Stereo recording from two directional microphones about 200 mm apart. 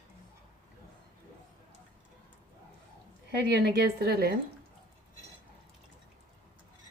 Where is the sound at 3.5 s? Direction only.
55° right (ahead or behind).